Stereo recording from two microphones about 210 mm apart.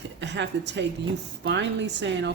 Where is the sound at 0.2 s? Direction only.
55° right (ahead or behind).